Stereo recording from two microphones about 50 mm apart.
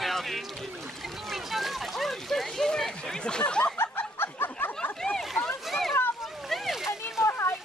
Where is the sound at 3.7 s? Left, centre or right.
Left.